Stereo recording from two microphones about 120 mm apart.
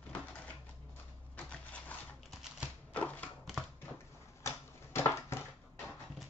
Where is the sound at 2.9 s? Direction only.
10° left (ahead or behind).